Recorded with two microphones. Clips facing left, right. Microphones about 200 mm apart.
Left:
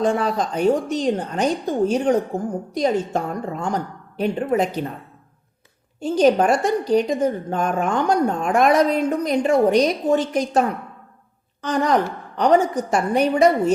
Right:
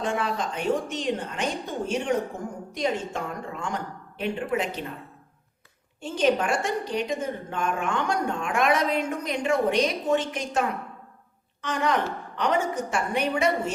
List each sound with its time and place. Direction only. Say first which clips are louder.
0.0 s a woman's voice: left 7 dB; 35° left (ahead or behind)
6.0 s a woman's voice: left 7 dB; 40° left (ahead or behind)